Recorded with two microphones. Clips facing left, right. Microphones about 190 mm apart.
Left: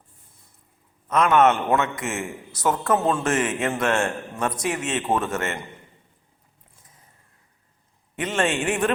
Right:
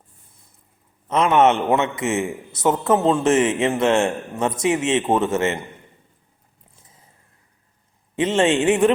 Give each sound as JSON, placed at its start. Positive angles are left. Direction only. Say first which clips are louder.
{"t": 1.0, "sound": "a man's voice", "louder": "right 2 dB", "side_deg": -25}
{"t": 8.1, "sound": "a man's voice", "louder": "right 6 dB", "side_deg": -25}